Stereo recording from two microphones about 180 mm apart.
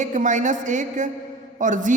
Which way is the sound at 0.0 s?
45° right (ahead or behind).